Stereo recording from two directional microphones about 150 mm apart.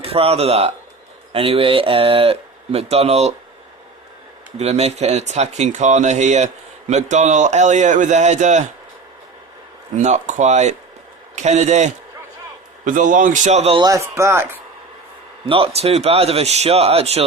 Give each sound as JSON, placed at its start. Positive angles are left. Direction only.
{"t": 0.0, "sound": "speech", "side_deg": -40}
{"t": 4.5, "sound": "speech", "side_deg": -45}
{"t": 10.0, "sound": "speech", "side_deg": -55}
{"t": 12.8, "sound": "a man's voice", "side_deg": -60}
{"t": 13.7, "sound": "speech", "side_deg": -25}
{"t": 15.4, "sound": "speech", "side_deg": -40}